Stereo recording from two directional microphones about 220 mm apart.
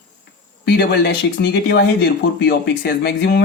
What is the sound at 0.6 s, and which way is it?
Speech, 50° left (ahead or behind).